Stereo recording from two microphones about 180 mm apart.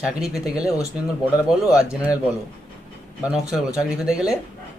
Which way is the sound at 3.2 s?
5° right (ahead or behind).